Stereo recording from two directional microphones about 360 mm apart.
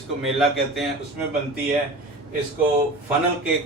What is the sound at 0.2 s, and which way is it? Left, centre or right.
Speech, centre.